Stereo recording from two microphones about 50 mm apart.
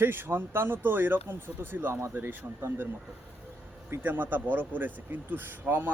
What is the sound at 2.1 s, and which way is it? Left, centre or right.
Speech, right.